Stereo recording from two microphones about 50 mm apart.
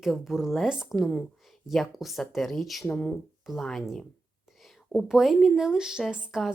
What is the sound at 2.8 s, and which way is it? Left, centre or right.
Speech, centre.